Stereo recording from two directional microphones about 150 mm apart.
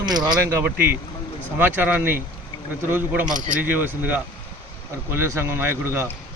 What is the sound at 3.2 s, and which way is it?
Speech, 55° right (ahead or behind).